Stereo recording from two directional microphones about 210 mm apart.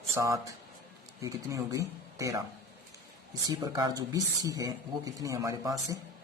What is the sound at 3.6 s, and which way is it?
Speech, 20° right (ahead or behind).